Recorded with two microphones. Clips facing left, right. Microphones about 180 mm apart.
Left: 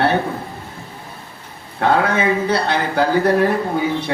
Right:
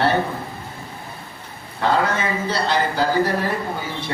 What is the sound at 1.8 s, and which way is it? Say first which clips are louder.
A man's voice: left 4 dB; 60° left (ahead or behind).